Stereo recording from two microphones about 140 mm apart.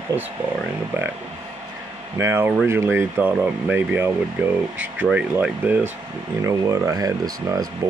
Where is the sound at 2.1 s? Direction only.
20° right (ahead or behind).